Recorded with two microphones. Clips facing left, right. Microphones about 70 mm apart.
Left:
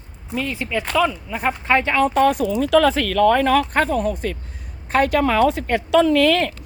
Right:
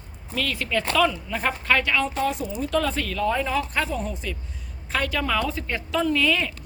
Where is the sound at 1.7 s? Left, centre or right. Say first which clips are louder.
Left 4 dB; left.